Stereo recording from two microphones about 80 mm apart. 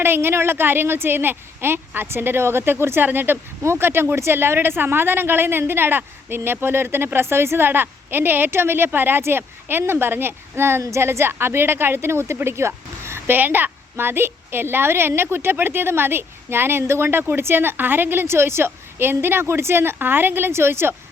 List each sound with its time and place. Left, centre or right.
0.0 s a woman's voice: right